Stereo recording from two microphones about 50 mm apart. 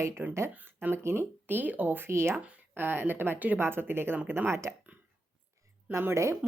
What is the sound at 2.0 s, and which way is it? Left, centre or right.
Speech, right.